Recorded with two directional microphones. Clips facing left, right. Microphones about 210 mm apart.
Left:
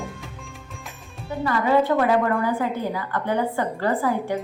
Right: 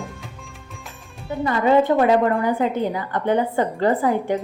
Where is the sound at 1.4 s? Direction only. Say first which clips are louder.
Right 3 dB; 20° right (ahead or behind).